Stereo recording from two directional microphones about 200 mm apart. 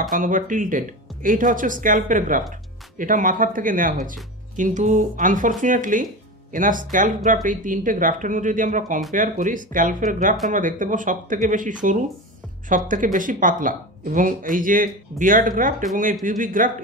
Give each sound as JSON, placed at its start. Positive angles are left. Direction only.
{"t": 0.1, "sound": "a man's voice", "side_deg": -40}